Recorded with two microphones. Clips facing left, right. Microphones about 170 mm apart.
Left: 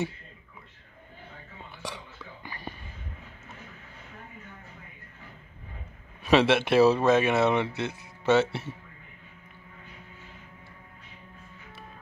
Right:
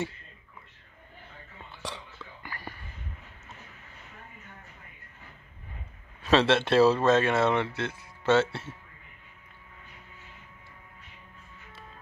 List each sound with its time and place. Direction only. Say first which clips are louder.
2.4 s whispering: left 2 dB; 20° left (ahead or behind)
6.2 s speech: left 1 dB; 15° left (ahead or behind)